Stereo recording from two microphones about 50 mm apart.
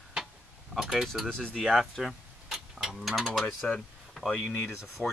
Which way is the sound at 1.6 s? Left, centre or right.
Centre.